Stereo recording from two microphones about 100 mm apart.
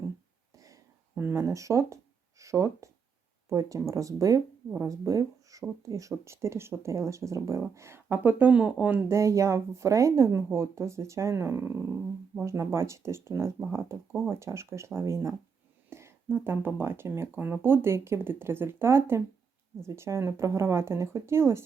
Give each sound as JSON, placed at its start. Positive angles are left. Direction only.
{"t": 0.5, "sound": "a sound", "side_deg": -35}
{"t": 1.1, "sound": "speech", "side_deg": -25}
{"t": 9.1, "sound": "speech", "side_deg": -30}